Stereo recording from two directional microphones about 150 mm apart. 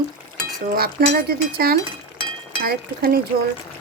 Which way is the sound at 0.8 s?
85° right.